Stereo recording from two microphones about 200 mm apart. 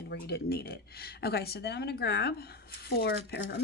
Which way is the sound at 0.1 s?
55° left (ahead or behind).